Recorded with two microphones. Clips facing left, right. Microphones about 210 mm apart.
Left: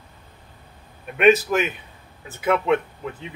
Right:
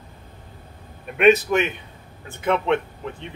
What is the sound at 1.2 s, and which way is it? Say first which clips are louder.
Speech: right 1 dB; centre (ahead or behind).